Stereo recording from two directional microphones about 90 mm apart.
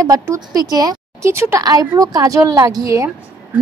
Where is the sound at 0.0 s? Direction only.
40° right (ahead or behind).